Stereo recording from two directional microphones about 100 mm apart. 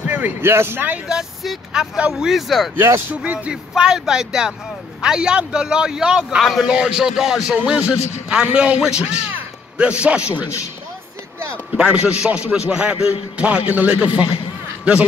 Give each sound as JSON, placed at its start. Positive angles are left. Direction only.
{"t": 0.0, "sound": "speech", "side_deg": -15}
{"t": 2.8, "sound": "speech", "side_deg": -25}
{"t": 3.2, "sound": "a man's voice", "side_deg": -10}
{"t": 11.7, "sound": "a man's voice", "side_deg": -10}